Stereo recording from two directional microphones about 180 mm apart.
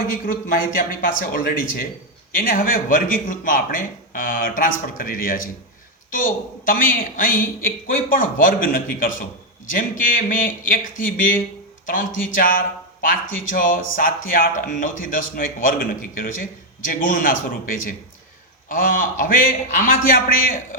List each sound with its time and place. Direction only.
0.0 s a man's voice: 50° left (ahead or behind)